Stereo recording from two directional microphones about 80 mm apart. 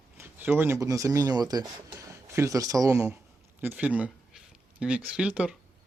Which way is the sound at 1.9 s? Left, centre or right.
Right.